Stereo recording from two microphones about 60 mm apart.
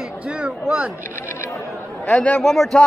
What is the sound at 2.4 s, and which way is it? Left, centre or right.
Speech, centre.